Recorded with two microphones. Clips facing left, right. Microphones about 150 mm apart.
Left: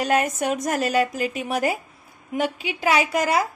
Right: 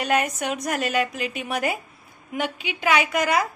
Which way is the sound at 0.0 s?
35° left (ahead or behind).